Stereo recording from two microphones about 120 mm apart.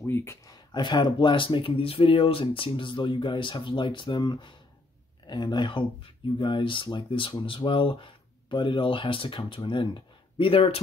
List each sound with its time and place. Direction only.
0.0 s speech: 20° left (ahead or behind)
0.7 s speech: 40° left (ahead or behind)